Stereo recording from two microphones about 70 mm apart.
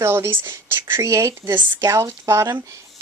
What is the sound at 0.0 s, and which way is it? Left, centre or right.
Speech, right.